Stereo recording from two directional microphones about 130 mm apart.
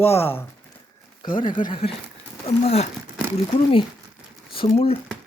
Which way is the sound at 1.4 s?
40° left (ahead or behind).